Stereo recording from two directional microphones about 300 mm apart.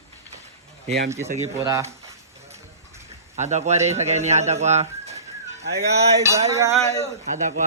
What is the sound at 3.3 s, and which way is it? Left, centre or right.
Speech, right.